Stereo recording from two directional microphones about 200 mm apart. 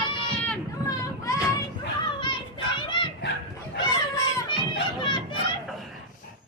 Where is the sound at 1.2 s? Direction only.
15° left (ahead or behind).